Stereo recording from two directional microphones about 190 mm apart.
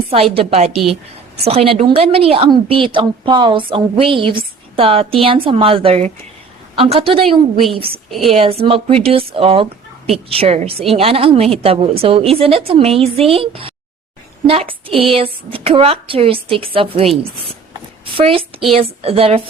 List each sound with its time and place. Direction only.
0.3 s a woman's voice: 30° right (ahead or behind)